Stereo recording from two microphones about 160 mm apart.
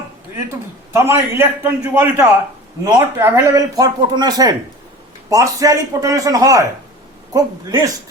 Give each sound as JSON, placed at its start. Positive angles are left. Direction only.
{"t": 0.9, "sound": "a man's voice", "side_deg": -15}